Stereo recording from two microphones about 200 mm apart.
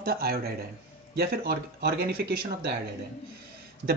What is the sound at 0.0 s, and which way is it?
Speech, 50° right (ahead or behind).